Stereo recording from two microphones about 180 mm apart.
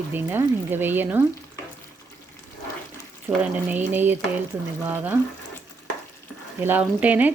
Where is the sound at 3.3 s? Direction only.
15° right (ahead or behind).